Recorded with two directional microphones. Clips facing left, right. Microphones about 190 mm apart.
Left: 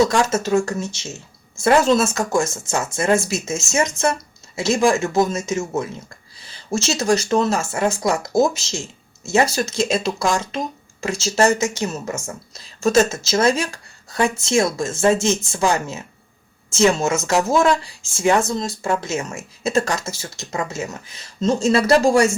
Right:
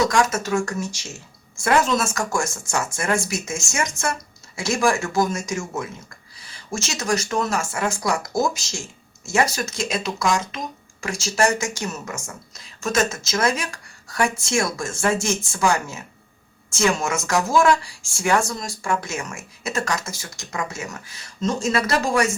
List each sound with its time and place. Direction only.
0.1 s speech: 25° left (ahead or behind)